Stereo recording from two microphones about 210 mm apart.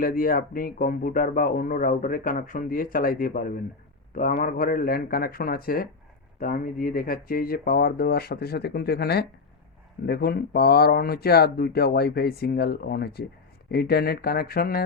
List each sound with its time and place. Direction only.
0.0 s speech: 45° left (ahead or behind)